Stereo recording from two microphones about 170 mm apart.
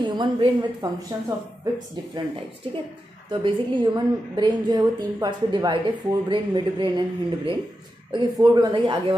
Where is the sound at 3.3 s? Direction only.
30° right (ahead or behind).